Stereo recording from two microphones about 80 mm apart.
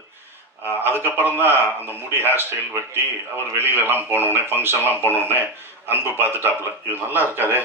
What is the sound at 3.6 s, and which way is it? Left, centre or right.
A man's voice, right.